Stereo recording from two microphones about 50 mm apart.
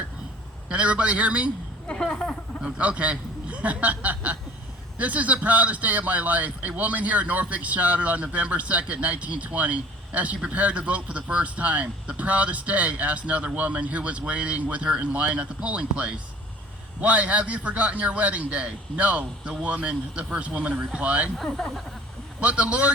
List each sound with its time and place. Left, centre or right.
0.7 s speech: right
1.9 s speech: centre
2.7 s a man's voice: right
21.3 s speech: centre
22.4 s speech: right